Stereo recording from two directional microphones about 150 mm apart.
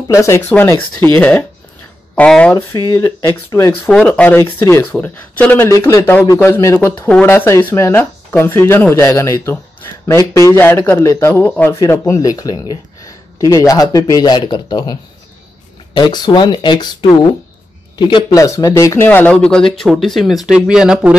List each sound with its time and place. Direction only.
0.1 s speech: 20° left (ahead or behind)
2.5 s speech: 25° left (ahead or behind)
5.8 s speech: 25° left (ahead or behind)
11.2 s speech: 10° left (ahead or behind); by 15.0 s 30° left (ahead or behind)
16.0 s speech: 30° left (ahead or behind)
19.0 s speech: 10° left (ahead or behind); by 21.2 s 5° right (ahead or behind)